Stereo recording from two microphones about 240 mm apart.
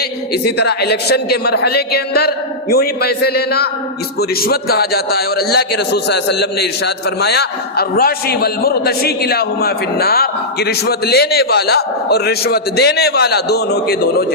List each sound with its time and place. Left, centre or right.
0.4 s a man's voice: left